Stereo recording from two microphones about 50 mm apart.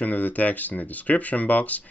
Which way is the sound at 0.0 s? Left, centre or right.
Left.